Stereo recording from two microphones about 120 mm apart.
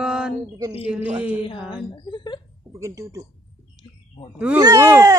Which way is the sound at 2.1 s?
40° left (ahead or behind).